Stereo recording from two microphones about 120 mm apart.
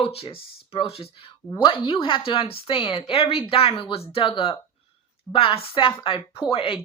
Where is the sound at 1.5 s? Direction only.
40° left (ahead or behind).